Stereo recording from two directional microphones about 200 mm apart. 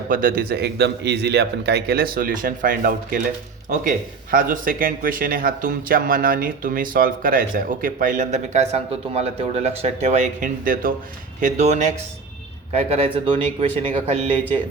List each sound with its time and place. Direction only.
0.1 s speech: 45° right (ahead or behind)